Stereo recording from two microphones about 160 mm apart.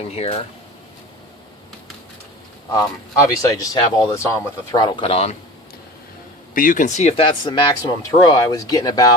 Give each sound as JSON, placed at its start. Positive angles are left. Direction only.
{"t": 0.0, "sound": "speech", "side_deg": 40}
{"t": 3.4, "sound": "speech", "side_deg": 20}
{"t": 6.5, "sound": "speech", "side_deg": 60}